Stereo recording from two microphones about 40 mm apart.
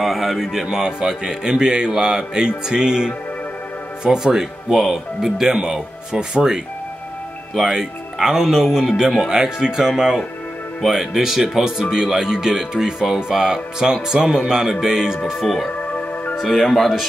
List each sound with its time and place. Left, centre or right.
0.0 s speech: centre
15.2 s speech: centre